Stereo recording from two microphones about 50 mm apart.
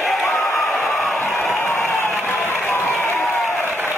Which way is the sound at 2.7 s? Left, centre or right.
Left.